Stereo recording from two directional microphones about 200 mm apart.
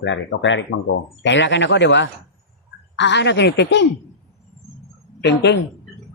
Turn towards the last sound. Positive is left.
turn(degrees=60)  # may be behind; listen again after turning